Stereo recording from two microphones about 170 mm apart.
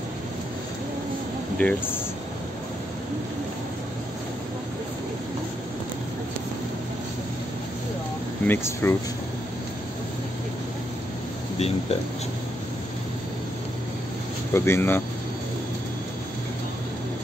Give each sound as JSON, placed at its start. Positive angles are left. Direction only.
{"t": 1.6, "sound": "speech", "side_deg": 10}
{"t": 8.5, "sound": "speech", "side_deg": 15}
{"t": 11.5, "sound": "speech", "side_deg": 40}
{"t": 14.5, "sound": "speech", "side_deg": 15}